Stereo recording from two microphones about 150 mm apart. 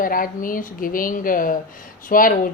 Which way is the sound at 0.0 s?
70° left (ahead or behind).